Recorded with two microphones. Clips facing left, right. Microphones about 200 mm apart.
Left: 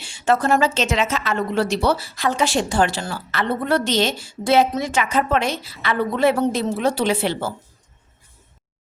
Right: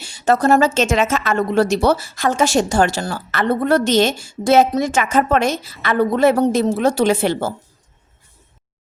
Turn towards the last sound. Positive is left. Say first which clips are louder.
# right 4 dB
turn(degrees=-45)  # may be behind; listen again after turning